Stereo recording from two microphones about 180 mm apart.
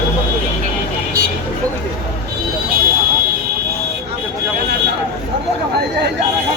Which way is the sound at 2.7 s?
55° right (ahead or behind).